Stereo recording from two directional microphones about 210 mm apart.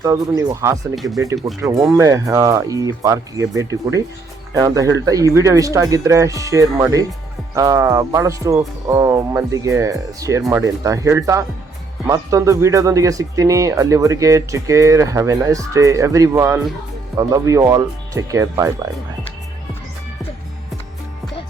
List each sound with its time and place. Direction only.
0.0 s speech: 15° right (ahead or behind)